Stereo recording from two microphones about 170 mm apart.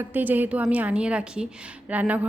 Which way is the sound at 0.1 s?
10° right (ahead or behind).